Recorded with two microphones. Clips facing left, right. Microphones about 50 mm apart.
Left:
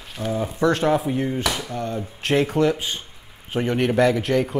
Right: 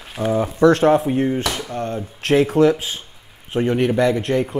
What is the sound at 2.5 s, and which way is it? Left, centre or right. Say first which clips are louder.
Speech: right 5 dB; right.